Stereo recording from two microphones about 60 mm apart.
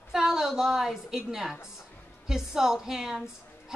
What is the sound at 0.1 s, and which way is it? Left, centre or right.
A woman's voice, centre.